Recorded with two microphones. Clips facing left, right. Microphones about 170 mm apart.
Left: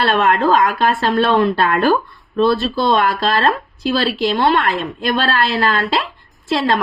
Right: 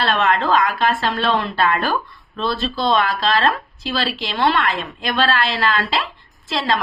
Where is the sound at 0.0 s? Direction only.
50° left (ahead or behind).